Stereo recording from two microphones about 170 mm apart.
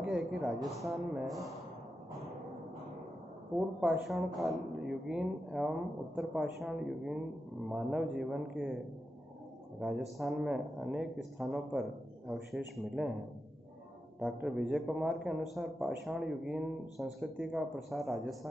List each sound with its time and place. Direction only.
0.0 s a man's voice: 5° right (ahead or behind)
3.5 s a man's voice: centre (ahead or behind)
9.8 s a man's voice: 5° right (ahead or behind)
14.2 s a man's voice: 5° right (ahead or behind)